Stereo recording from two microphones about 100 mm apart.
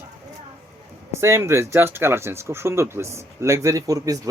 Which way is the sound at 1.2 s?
25° right (ahead or behind).